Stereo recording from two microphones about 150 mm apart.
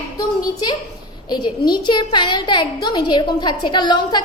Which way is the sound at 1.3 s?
30° left (ahead or behind).